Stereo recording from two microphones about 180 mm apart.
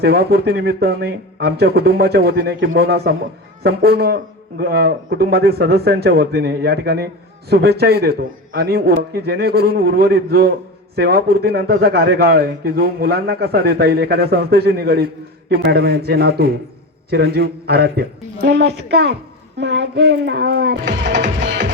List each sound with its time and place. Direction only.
0.0 s a man's voice: 65° right (ahead or behind)
18.4 s music: 70° right (ahead or behind)
19.5 s music: 75° right (ahead or behind)